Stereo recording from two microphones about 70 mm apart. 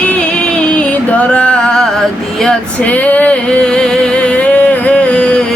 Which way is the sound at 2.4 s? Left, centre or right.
Centre.